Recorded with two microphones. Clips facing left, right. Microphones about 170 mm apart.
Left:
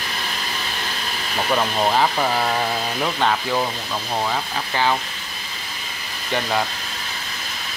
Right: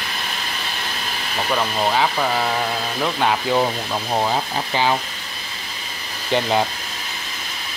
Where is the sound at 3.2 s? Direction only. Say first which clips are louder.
Right 3 dB; 15° right (ahead or behind).